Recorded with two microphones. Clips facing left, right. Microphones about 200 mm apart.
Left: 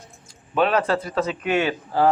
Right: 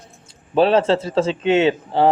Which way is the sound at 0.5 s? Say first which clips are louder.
Right 5 dB; 30° right (ahead or behind).